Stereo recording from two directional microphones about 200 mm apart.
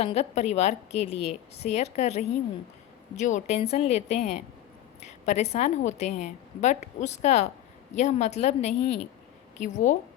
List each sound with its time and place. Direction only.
0.0 s a woman's voice: 30° left (ahead or behind)